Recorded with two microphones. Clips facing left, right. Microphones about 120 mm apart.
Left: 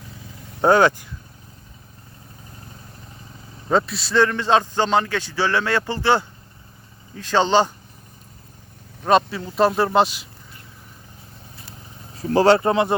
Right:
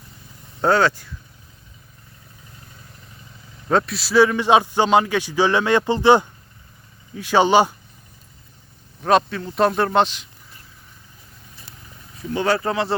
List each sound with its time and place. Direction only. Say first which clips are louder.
0.6 s speech: left 2 dB; 15° left (ahead or behind)
3.7 s a man's voice: right 1 dB; centre (ahead or behind)
9.0 s speech: even; centre (ahead or behind)
12.1 s speech: left 6 dB; 35° left (ahead or behind)